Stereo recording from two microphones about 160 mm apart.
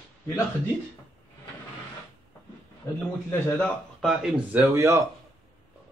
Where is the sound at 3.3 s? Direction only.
5° left (ahead or behind).